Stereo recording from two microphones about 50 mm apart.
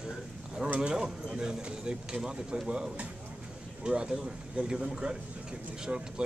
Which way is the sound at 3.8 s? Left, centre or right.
Centre.